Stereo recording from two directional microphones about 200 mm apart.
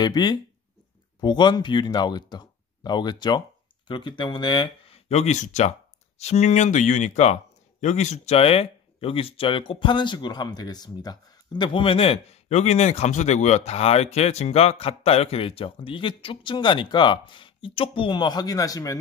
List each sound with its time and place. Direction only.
0.0 s speech: 20° left (ahead or behind)